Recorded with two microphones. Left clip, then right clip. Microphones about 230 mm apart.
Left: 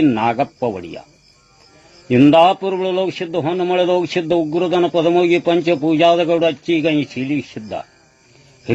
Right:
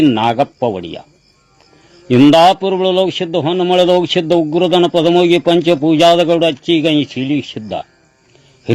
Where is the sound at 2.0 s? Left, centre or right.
Right.